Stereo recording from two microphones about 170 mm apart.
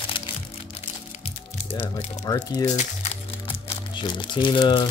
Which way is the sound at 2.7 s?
40° left (ahead or behind).